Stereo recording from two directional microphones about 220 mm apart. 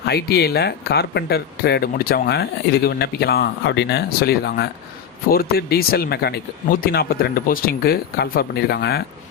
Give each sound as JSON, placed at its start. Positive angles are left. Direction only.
{"t": 0.0, "sound": "speech", "side_deg": 45}